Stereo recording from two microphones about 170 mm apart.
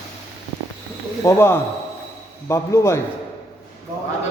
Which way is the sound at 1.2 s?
15° left (ahead or behind).